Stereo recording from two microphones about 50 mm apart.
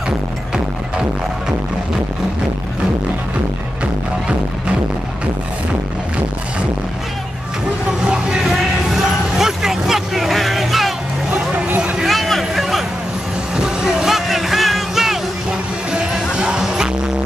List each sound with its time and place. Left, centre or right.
8.5 s speech: centre
11.3 s music: right
12.0 s a sound: centre
13.6 s vehicle: centre
15.9 s music: centre